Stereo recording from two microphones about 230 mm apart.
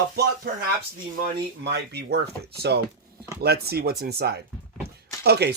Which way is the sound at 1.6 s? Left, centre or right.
Right.